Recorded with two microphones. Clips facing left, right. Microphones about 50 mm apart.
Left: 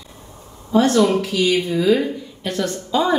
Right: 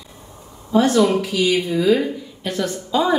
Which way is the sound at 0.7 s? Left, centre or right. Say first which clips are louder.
Even; centre.